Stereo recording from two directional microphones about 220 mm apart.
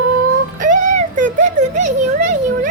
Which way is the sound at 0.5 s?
35° right (ahead or behind).